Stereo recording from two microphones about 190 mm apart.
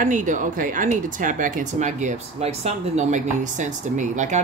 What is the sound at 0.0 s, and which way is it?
Speech, 40° right (ahead or behind).